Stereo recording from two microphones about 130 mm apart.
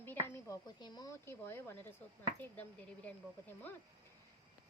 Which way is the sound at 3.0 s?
15° left (ahead or behind).